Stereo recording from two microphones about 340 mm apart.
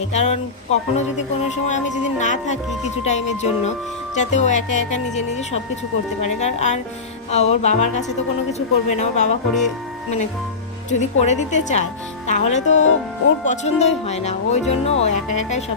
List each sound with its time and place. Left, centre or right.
0.1 s speech: centre
10.9 s speech: centre